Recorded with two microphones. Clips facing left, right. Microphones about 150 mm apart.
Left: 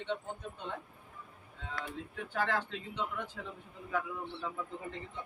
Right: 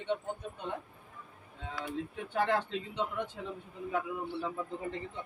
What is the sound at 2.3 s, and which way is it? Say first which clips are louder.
A man's voice: right 4 dB; 20° right (ahead or behind).